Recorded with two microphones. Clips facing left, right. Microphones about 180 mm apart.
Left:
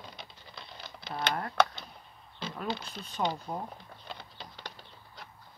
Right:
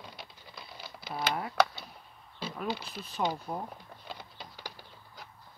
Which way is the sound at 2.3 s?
5° right (ahead or behind).